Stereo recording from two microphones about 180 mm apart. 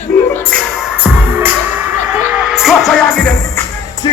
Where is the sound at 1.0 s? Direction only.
10° right (ahead or behind); by 3.6 s 5° left (ahead or behind).